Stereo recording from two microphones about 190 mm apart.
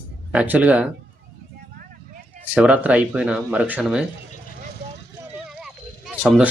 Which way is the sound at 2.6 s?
5° right (ahead or behind).